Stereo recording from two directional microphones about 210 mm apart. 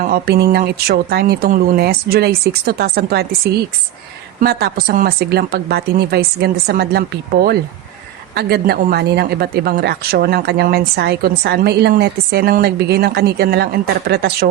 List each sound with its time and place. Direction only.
0.0 s a woman's voice: 45° right (ahead or behind)
8.4 s a woman's voice: 50° right (ahead or behind)